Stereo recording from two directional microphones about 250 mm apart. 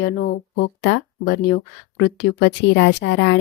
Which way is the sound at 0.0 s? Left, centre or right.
Left.